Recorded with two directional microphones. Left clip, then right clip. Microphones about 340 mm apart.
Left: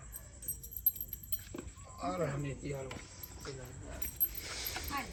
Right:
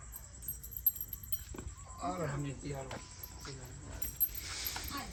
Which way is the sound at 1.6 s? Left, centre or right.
Centre.